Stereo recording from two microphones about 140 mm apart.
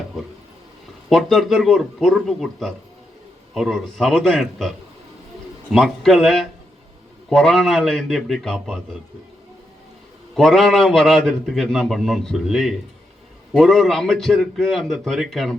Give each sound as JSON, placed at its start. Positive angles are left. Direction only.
{"t": 1.1, "sound": "a man's voice", "side_deg": 0}
{"t": 5.7, "sound": "a man's voice", "side_deg": 0}
{"t": 10.3, "sound": "a man's voice", "side_deg": 0}